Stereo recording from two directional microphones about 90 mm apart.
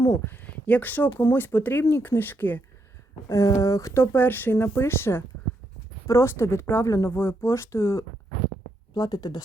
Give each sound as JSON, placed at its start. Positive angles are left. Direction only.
{"t": 0.3, "sound": "speech", "side_deg": 20}
{"t": 3.2, "sound": "speech", "side_deg": 35}
{"t": 9.0, "sound": "speech", "side_deg": 50}